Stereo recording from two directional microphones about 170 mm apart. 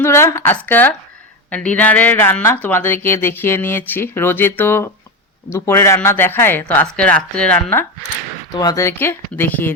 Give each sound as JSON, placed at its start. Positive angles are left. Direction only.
{"t": 0.0, "sound": "speech", "side_deg": 15}
{"t": 8.5, "sound": "speech", "side_deg": 20}